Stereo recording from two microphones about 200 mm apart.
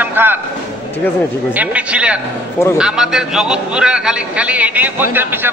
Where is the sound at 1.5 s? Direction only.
5° right (ahead or behind).